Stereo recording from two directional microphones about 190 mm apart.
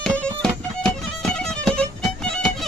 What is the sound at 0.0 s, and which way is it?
Music, 5° left (ahead or behind).